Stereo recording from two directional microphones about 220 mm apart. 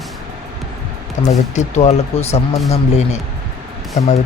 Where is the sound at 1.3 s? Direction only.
30° left (ahead or behind).